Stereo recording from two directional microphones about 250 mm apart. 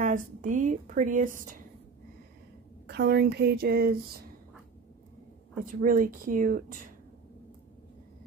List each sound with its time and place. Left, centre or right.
0.0 s speech: right
2.9 s speech: right
5.7 s speech: right